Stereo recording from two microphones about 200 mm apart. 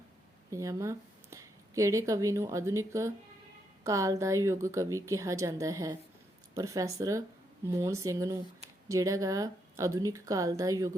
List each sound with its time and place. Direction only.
0.5 s a woman's voice: 15° right (ahead or behind)